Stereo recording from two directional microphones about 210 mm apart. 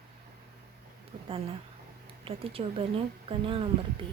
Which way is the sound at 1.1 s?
35° right (ahead or behind).